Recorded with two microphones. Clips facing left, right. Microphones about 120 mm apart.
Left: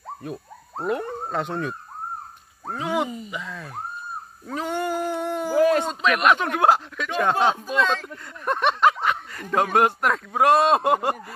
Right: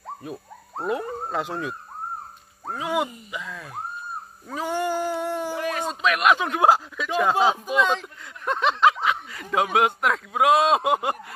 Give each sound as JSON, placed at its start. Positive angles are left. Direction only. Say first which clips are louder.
{"t": 0.0, "sound": "speech", "louder": "left 1 dB", "side_deg": 0}
{"t": 6.4, "sound": "speech", "louder": "even", "side_deg": -15}
{"t": 8.5, "sound": "speech", "louder": "even", "side_deg": 0}